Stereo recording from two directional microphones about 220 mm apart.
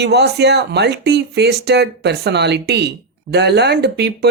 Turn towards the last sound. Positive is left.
turn(degrees=-50)  # may be behind; listen again after turning